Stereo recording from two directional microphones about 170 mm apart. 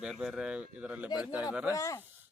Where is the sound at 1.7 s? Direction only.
20° left (ahead or behind).